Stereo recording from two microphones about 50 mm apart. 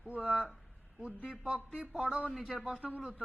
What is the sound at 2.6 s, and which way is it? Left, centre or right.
Speech, right.